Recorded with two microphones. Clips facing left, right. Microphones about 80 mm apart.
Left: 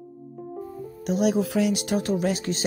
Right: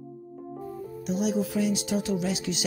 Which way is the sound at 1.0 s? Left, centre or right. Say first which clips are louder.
Left 5 dB; left.